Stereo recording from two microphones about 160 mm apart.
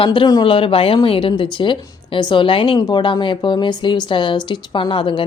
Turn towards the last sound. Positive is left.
turn(degrees=30)  # may be behind; listen again after turning